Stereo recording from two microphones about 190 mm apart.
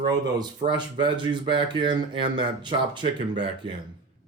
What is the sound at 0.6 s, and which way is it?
Speech, 25° right (ahead or behind).